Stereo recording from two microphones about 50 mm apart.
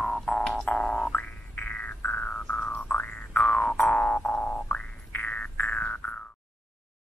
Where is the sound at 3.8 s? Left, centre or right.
Left.